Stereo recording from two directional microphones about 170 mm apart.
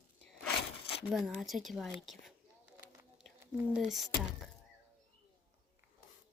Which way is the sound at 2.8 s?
10° right (ahead or behind).